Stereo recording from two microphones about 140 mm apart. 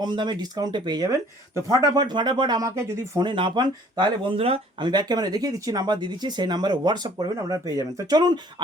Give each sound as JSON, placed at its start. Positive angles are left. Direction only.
{"t": 0.0, "sound": "speech", "side_deg": -35}
{"t": 4.9, "sound": "speech", "side_deg": -30}